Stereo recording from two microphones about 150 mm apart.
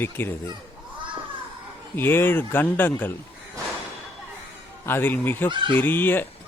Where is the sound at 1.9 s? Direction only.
15° left (ahead or behind).